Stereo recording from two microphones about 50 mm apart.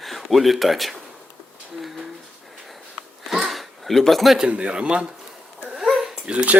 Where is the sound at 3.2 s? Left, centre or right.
Centre.